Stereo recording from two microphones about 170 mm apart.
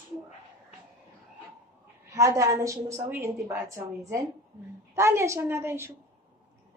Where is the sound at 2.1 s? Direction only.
20° right (ahead or behind).